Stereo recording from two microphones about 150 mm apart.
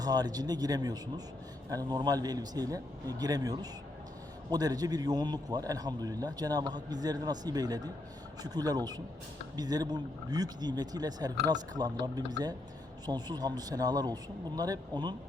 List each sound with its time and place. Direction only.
0.0 s a man's voice: 25° right (ahead or behind)
13.1 s a man's voice: 25° right (ahead or behind)